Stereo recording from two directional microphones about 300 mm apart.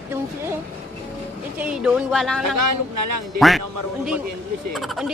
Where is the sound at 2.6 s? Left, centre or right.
Right.